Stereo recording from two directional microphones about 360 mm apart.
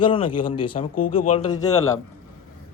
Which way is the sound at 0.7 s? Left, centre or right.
Left.